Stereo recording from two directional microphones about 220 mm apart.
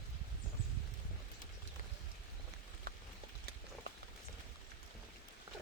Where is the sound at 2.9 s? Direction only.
40° right (ahead or behind).